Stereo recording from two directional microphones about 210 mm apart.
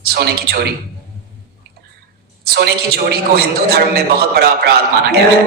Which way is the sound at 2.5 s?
50° right (ahead or behind).